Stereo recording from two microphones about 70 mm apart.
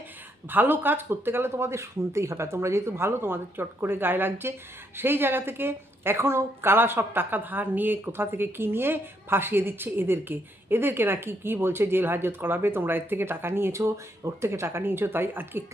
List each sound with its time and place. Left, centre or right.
0.5 s a woman's voice: right